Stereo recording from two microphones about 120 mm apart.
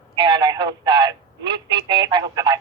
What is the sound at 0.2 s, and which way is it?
Speech, 40° right (ahead or behind).